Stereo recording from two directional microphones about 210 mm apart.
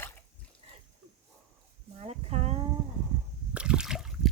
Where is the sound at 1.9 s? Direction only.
30° right (ahead or behind).